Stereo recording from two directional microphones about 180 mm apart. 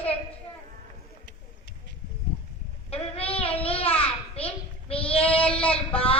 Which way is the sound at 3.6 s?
30° left (ahead or behind).